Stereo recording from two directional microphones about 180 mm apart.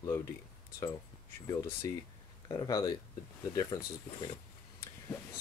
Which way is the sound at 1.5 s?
15° left (ahead or behind).